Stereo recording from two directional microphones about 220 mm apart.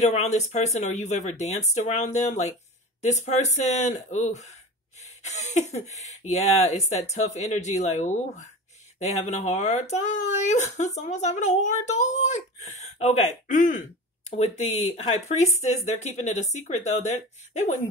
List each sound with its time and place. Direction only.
0.0 s speech: 30° left (ahead or behind)